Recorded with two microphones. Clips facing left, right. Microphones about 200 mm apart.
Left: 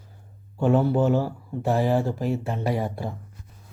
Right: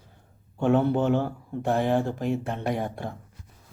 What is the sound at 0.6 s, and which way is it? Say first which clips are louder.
Speech: left 1 dB; 5° left (ahead or behind).